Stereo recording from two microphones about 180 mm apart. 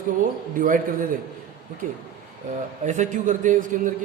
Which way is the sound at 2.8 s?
45° right (ahead or behind).